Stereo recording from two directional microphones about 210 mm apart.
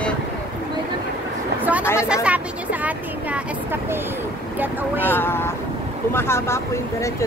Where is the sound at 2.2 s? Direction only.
5° right (ahead or behind).